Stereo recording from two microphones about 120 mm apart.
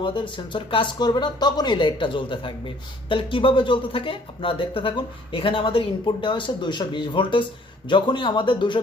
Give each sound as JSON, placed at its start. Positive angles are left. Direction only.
{"t": 0.0, "sound": "speech", "side_deg": 45}